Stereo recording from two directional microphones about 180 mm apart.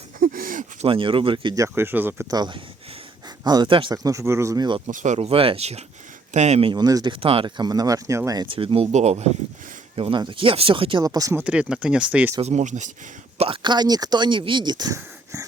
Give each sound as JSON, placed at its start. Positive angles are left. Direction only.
{"t": 0.2, "sound": "a sound", "side_deg": -50}
{"t": 0.9, "sound": "speech", "side_deg": -30}
{"t": 4.9, "sound": "speech", "side_deg": -45}
{"t": 11.4, "sound": "speech", "side_deg": -5}
{"t": 12.4, "sound": "speech", "side_deg": -40}
{"t": 13.4, "sound": "speech", "side_deg": -25}